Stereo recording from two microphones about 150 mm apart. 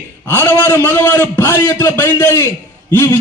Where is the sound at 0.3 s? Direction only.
15° left (ahead or behind).